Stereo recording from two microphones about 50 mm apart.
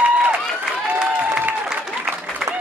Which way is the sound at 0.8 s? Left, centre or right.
Right.